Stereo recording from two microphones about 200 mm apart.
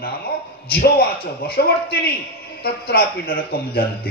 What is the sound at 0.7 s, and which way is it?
A man's voice, 50° left (ahead or behind).